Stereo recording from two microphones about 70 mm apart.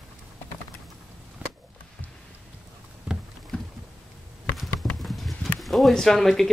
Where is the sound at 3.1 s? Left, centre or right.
Centre.